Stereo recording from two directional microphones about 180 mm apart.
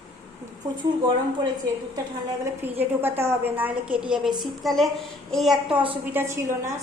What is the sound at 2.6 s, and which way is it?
A woman's voice, 10° right (ahead or behind).